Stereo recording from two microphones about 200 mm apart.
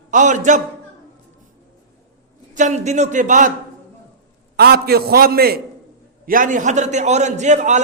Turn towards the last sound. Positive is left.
turn(degrees=-35)  # may be behind; listen again after turning